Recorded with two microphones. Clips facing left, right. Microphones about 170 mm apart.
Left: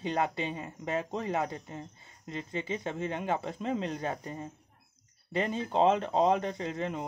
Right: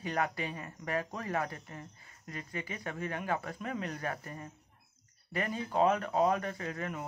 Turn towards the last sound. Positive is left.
turn(degrees=25)  # may be behind; listen again after turning